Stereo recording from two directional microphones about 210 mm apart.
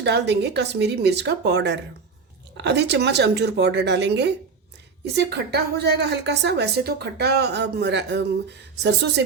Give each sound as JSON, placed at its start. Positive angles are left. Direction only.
{"t": 0.0, "sound": "a woman's voice", "side_deg": -55}